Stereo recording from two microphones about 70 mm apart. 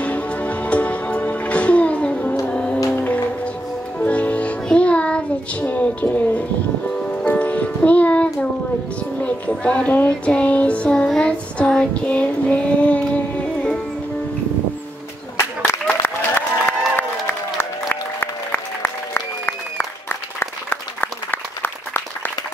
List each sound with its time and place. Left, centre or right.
0.0 s music: centre
4.0 s music: left
9.9 s child singing: centre
11.1 s female singing: centre
15.3 s a sound: left
20.7 s applause: left